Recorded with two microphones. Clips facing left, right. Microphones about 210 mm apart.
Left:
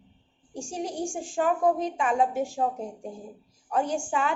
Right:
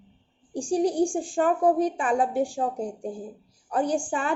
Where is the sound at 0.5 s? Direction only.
35° right (ahead or behind).